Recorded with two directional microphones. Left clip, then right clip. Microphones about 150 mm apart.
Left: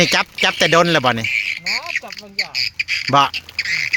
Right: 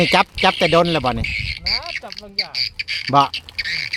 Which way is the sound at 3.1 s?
20° left (ahead or behind).